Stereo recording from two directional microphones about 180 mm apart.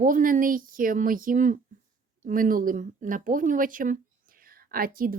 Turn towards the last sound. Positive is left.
turn(degrees=-55)  # may be behind; listen again after turning